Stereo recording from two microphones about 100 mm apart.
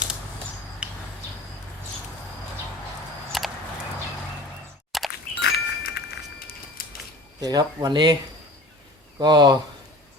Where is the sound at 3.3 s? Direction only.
Centre (ahead or behind).